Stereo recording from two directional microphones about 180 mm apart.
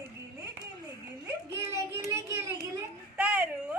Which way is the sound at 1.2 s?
15° right (ahead or behind).